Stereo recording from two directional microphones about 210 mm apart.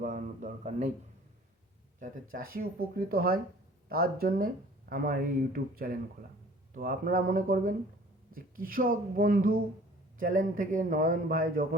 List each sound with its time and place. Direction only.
0.0 s speech: 40° right (ahead or behind)
2.0 s a man's voice: 40° right (ahead or behind)